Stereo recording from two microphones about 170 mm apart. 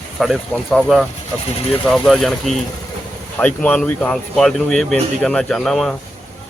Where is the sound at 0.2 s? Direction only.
Centre (ahead or behind).